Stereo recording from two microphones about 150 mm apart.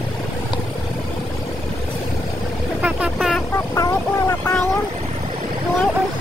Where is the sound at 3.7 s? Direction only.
20° left (ahead or behind).